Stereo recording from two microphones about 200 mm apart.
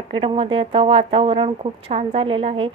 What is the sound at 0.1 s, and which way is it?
Speech, 25° right (ahead or behind).